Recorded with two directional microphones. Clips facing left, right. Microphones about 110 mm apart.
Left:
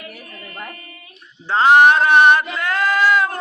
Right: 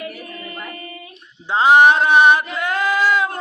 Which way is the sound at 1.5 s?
15° right (ahead or behind).